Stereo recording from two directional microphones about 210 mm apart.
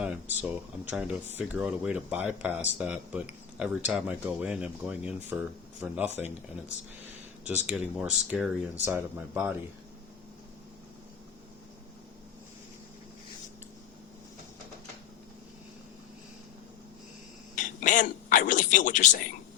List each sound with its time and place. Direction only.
0.0 s speech: 5° right (ahead or behind)
7.7 s speech: 5° right (ahead or behind)
17.5 s a sound: 40° left (ahead or behind)